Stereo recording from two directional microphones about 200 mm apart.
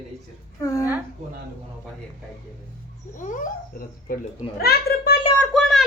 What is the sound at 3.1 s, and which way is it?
A child's voice, 40° left (ahead or behind).